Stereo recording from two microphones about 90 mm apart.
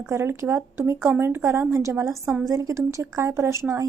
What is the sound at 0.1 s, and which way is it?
Speech, 30° right (ahead or behind).